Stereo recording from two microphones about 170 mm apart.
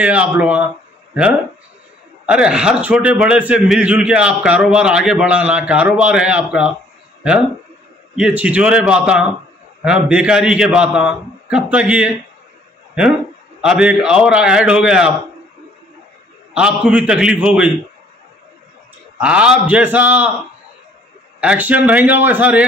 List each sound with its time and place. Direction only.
0.0 s a man's voice: 5° right (ahead or behind)
8.2 s a man's voice: 10° right (ahead or behind)
13.6 s a man's voice: 5° right (ahead or behind)
16.5 s a man's voice: 5° right (ahead or behind)
19.1 s a man's voice: 5° right (ahead or behind)
21.4 s a man's voice: 10° right (ahead or behind)